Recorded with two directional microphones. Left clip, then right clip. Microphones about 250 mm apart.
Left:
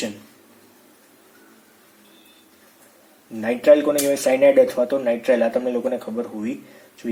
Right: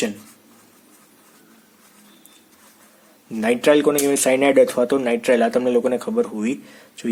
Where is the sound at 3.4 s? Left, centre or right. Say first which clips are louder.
Left 1 dB; right.